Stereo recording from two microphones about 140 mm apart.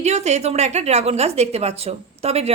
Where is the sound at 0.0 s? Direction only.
55° right (ahead or behind).